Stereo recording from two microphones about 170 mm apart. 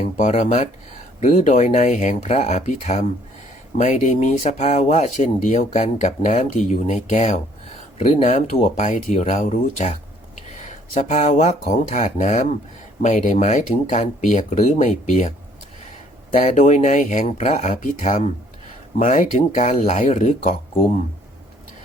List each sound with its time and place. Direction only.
0.0 s speech: 40° left (ahead or behind)
1.2 s speech: 55° left (ahead or behind)
16.4 s speech: 45° left (ahead or behind)